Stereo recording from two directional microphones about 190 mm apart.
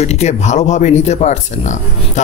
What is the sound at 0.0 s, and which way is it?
A man's voice, 35° left (ahead or behind).